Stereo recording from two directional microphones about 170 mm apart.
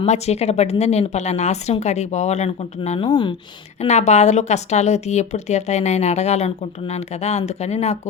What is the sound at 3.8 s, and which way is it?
A woman's voice, 45° left (ahead or behind).